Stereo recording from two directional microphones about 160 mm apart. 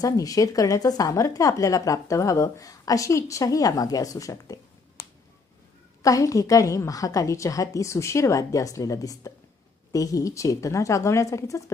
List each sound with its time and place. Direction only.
0.0 s speech: 20° left (ahead or behind)
6.0 s speech: 20° left (ahead or behind)